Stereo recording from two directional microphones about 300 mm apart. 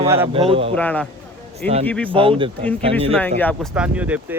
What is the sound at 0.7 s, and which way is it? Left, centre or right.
Speech, centre.